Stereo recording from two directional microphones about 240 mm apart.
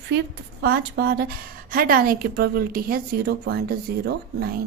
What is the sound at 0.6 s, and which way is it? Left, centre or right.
Speech, right.